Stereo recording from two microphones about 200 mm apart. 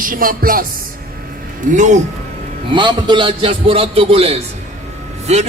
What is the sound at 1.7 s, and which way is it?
Music, 40° right (ahead or behind).